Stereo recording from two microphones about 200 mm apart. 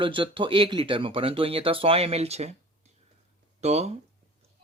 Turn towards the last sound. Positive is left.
turn(degrees=-35)  # may be behind; listen again after turning